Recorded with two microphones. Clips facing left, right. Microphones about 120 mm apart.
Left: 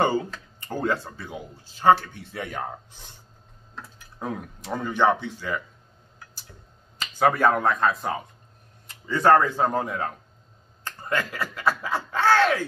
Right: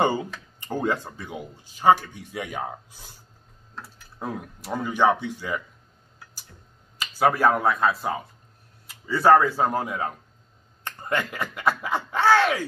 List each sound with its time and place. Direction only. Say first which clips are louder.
0.0 s speech: even; 15° right (ahead or behind)
7.0 s speech: even; 10° right (ahead or behind)
10.8 s speech: right 1 dB; 20° right (ahead or behind)